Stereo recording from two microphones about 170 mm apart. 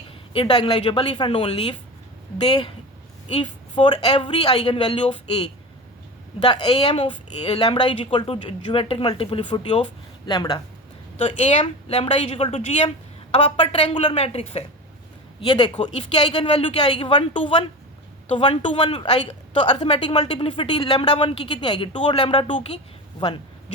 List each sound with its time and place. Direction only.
0.3 s a woman's voice: 30° left (ahead or behind)
3.8 s speech: 30° left (ahead or behind)
15.4 s a woman's voice: 25° left (ahead or behind)
15.8 s a woman's voice: 35° left (ahead or behind)